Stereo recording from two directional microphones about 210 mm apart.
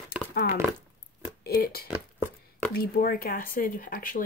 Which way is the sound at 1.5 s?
45° left (ahead or behind).